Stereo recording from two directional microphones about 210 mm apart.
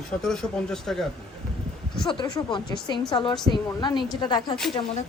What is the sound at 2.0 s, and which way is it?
Speech, 20° left (ahead or behind).